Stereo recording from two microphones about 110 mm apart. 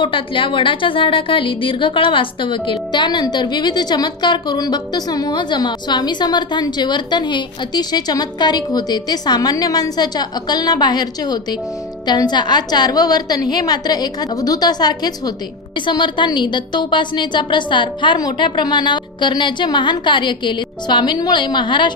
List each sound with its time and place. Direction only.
0.0 s a woman's voice: 50° left (ahead or behind)